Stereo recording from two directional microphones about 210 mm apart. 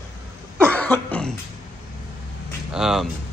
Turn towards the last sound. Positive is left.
turn(degrees=0)  # may be behind; listen again after turning